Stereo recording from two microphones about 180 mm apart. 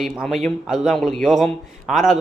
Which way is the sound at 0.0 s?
Centre (ahead or behind).